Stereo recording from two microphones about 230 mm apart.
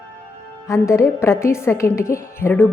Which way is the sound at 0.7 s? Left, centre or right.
Centre.